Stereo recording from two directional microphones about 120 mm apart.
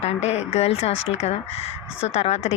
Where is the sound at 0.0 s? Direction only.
65° left (ahead or behind).